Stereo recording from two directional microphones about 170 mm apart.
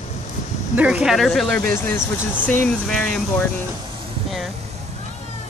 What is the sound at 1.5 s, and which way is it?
Speech, 15° left (ahead or behind).